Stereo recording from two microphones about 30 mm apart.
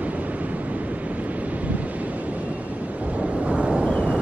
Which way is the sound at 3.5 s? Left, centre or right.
Right.